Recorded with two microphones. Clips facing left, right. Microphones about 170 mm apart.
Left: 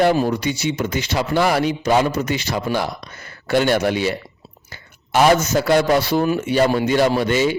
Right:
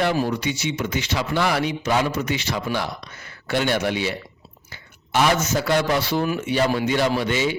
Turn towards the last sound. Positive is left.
turn(degrees=45)  # may be behind; listen again after turning